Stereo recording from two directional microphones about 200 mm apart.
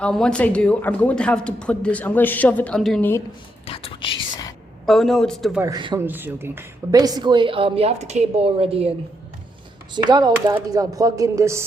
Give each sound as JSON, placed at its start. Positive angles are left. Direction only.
{"t": 0.0, "sound": "speech", "side_deg": 5}
{"t": 3.7, "sound": "speech", "side_deg": 30}
{"t": 4.9, "sound": "speech", "side_deg": 0}
{"t": 5.6, "sound": "a woman's voice", "side_deg": -20}
{"t": 6.1, "sound": "a woman's voice", "side_deg": -10}
{"t": 9.9, "sound": "a woman's voice", "side_deg": -20}